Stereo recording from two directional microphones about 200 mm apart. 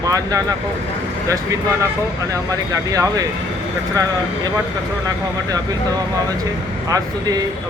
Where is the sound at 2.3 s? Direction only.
15° right (ahead or behind).